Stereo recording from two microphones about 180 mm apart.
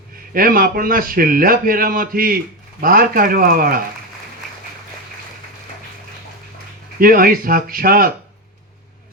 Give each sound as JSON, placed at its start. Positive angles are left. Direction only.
{"t": 0.3, "sound": "a man's voice", "side_deg": -55}
{"t": 7.0, "sound": "a man's voice", "side_deg": -55}